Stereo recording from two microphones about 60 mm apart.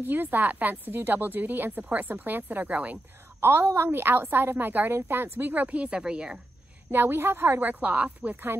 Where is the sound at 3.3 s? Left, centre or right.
Right; by 6.4 s centre.